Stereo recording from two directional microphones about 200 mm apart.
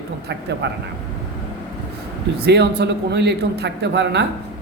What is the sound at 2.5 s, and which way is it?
A man's voice, 55° right (ahead or behind).